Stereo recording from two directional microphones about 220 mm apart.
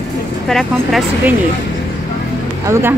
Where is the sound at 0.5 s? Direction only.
Centre (ahead or behind).